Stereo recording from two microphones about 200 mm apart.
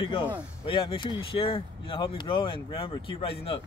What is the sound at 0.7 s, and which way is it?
Speech, 25° left (ahead or behind).